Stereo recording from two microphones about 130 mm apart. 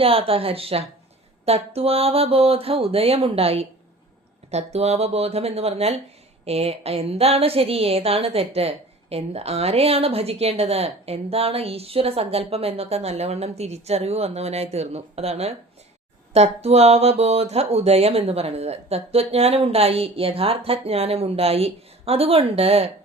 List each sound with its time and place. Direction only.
0.0 s a woman's voice: 45° right (ahead or behind)